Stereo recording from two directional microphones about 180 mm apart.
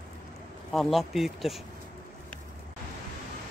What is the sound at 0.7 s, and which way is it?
Speech, centre (ahead or behind).